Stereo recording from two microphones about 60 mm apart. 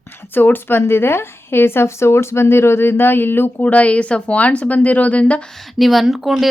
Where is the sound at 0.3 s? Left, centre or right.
Left.